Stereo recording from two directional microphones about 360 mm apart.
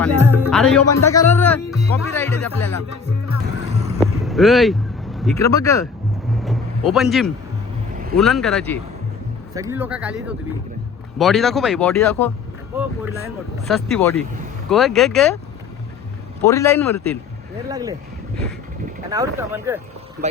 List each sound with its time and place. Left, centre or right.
0.0 s speech: centre
4.0 s speech: centre
6.4 s a sound: centre
8.1 s speech: centre
12.7 s speech: centre
16.4 s a man's voice: centre
17.7 s speech: centre
19.1 s speech: centre